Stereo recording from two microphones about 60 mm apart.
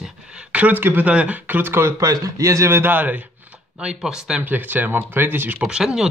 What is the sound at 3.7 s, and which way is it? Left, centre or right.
Speech, centre.